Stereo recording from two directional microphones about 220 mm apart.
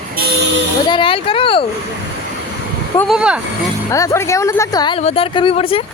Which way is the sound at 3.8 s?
15° left (ahead or behind).